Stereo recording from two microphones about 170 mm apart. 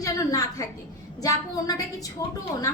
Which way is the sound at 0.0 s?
20° left (ahead or behind).